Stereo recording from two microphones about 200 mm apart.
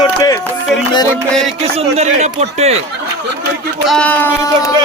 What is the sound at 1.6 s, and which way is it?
Speech, 30° right (ahead or behind).